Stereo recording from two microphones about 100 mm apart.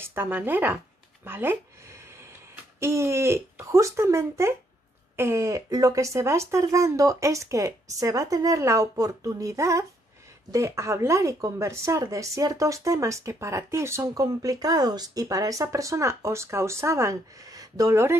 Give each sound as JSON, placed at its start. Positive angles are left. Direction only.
{"t": 0.0, "sound": "speech", "side_deg": -20}
{"t": 14.0, "sound": "speech", "side_deg": -35}